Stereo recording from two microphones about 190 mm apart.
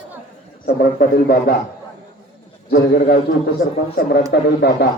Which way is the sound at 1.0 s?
50° left (ahead or behind).